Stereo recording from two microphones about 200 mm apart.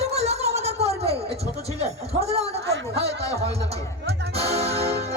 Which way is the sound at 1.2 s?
30° right (ahead or behind).